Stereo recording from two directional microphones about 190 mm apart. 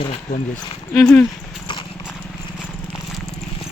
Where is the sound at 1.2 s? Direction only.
25° left (ahead or behind).